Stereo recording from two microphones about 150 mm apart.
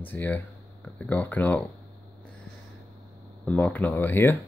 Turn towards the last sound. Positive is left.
turn(degrees=15)  # may be behind; listen again after turning